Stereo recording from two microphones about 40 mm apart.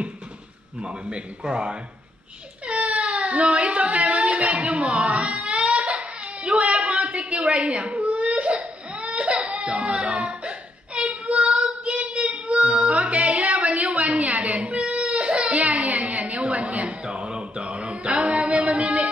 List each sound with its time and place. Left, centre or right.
0.7 s a man's voice: right
2.6 s speech: right
5.0 s a sound: right
5.9 s baby cry: right
7.0 s crying: right
11.0 s child singing: right
11.8 s a sound: right
14.4 s baby cry: right
17.0 s a sound: right